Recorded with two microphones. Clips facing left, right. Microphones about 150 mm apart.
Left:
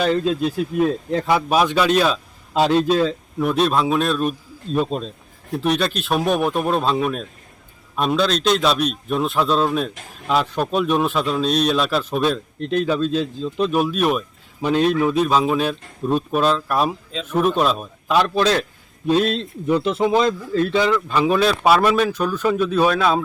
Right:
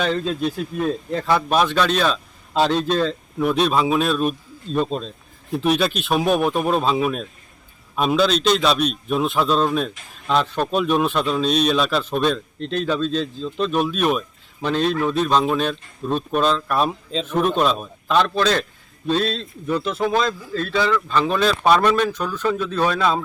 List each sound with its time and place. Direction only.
0.0 s speech: 5° left (ahead or behind)